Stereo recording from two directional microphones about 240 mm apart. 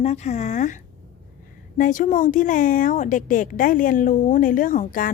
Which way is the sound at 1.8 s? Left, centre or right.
Left.